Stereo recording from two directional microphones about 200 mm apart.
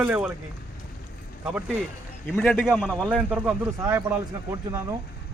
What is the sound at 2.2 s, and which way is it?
A man's voice, 5° left (ahead or behind).